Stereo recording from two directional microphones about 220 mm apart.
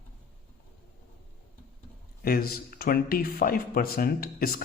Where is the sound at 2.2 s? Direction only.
45° left (ahead or behind).